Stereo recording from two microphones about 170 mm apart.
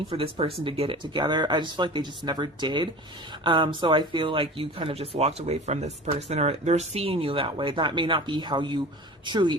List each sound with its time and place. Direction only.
0.1 s speech: 35° right (ahead or behind)